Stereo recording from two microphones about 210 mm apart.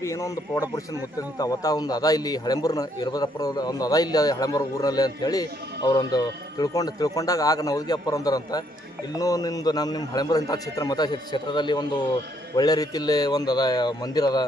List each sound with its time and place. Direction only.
0.0 s a man's voice: 15° left (ahead or behind)